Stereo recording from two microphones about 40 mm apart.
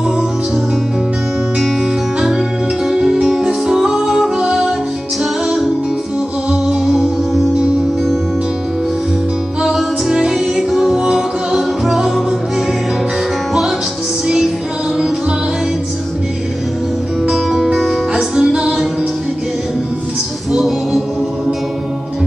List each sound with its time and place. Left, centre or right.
2.1 s music: centre
6.8 s music: centre
10.0 s music: centre
14.2 s music: centre
17.5 s music: centre
20.5 s music: centre